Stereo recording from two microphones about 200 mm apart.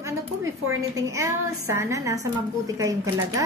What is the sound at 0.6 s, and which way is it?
A woman's voice, 15° right (ahead or behind).